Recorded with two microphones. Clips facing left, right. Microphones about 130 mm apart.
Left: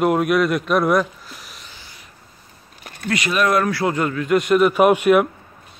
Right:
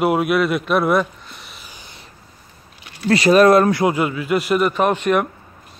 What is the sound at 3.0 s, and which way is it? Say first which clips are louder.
Speech: right 8 dB; 35° right (ahead or behind).